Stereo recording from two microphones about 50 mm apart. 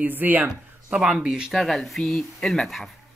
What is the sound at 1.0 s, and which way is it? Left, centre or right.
Speech, centre.